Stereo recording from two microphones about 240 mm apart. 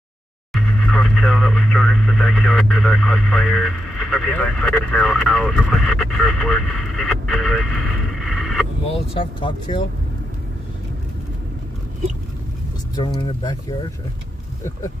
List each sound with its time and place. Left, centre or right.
0.5 s speech: centre
9.1 s speech: left
12.9 s speech: centre